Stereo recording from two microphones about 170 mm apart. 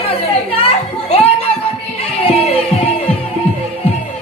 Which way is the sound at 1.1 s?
35° left (ahead or behind).